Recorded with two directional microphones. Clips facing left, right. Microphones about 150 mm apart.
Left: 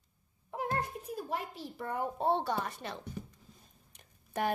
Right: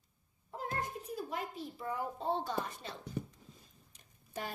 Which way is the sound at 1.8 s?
65° left (ahead or behind).